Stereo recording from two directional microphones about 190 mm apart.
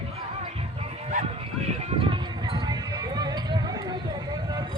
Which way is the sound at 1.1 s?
40° right (ahead or behind).